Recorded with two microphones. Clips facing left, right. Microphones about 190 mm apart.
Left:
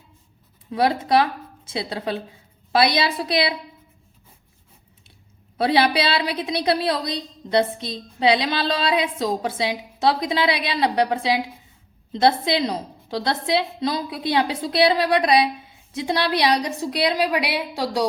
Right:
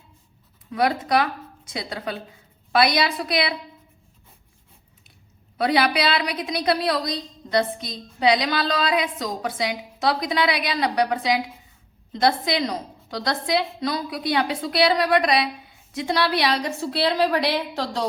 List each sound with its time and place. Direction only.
0.7 s a woman's voice: 25° left (ahead or behind)
5.5 s a woman's voice: 25° left (ahead or behind); by 18.1 s 10° left (ahead or behind)